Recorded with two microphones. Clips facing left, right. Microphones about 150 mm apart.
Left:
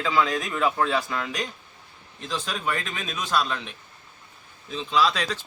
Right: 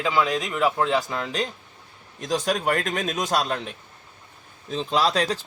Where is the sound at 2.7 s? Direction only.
45° right (ahead or behind).